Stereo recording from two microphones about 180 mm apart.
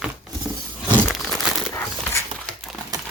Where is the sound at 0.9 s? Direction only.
5° left (ahead or behind).